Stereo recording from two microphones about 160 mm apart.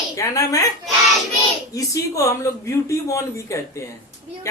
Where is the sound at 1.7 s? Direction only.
20° left (ahead or behind).